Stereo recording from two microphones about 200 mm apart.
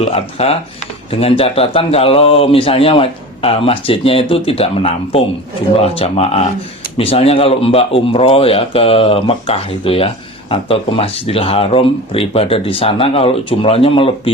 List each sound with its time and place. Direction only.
0.0 s a man's voice: 30° left (ahead or behind)